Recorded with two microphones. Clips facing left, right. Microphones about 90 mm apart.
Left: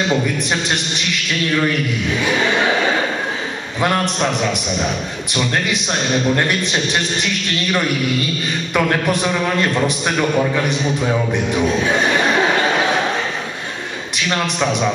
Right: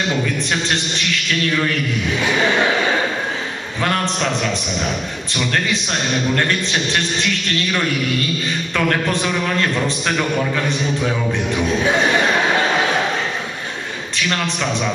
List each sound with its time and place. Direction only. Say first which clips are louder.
3.8 s a man's voice: left 2 dB; 15° left (ahead or behind)
6.3 s a man's voice: left 1 dB; 15° left (ahead or behind)
8.7 s a man's voice: left 2 dB; 15° left (ahead or behind)